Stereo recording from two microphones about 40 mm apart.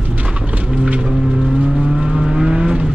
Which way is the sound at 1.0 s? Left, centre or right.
Centre.